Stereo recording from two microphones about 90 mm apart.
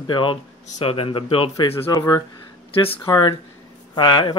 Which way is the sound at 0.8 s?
90° left.